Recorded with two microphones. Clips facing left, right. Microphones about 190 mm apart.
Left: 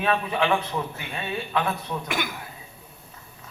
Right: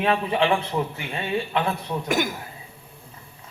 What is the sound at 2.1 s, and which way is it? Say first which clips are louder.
Speech: right 8 dB; 45° right (ahead or behind).